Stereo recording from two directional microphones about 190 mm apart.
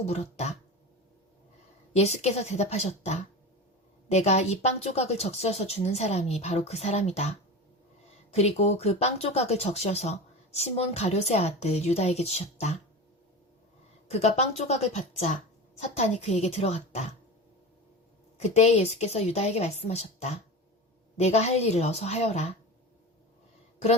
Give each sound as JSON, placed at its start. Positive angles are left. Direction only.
{"t": 0.1, "sound": "speech", "side_deg": 35}
{"t": 1.9, "sound": "speech", "side_deg": 35}
{"t": 14.1, "sound": "speech", "side_deg": 35}
{"t": 18.3, "sound": "speech", "side_deg": 35}